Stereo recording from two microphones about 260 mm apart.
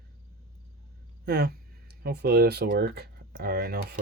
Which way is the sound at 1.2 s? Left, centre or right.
Right.